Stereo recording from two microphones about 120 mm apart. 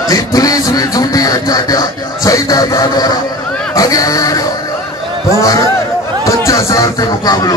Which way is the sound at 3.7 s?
30° left (ahead or behind).